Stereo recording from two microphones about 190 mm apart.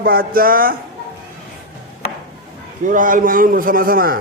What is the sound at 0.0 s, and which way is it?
Male singing, 50° right (ahead or behind).